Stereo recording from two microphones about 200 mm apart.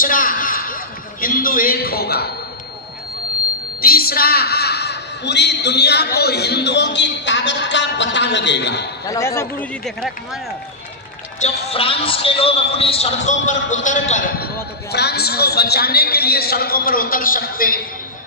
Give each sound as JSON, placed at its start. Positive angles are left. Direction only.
{"t": 0.0, "sound": "a sound", "side_deg": 45}
{"t": 3.8, "sound": "a woman's voice", "side_deg": 50}
{"t": 9.0, "sound": "speech", "side_deg": 15}
{"t": 11.3, "sound": "a man's voice", "side_deg": 30}
{"t": 14.9, "sound": "a man's voice", "side_deg": 55}